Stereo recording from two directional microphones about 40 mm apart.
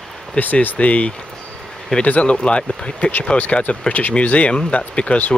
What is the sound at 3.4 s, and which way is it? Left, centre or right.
Speech, left.